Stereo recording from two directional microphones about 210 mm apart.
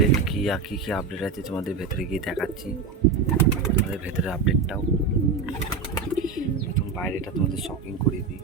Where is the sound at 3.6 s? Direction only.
5° right (ahead or behind).